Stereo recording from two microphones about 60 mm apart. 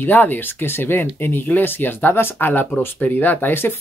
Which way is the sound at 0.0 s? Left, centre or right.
Left.